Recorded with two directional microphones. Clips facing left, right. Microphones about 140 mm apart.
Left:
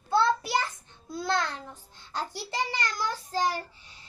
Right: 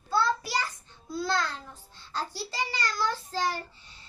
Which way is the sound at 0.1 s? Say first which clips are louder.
Left 3 dB; 25° left (ahead or behind).